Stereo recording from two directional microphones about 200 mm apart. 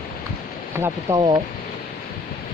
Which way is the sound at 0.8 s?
20° right (ahead or behind).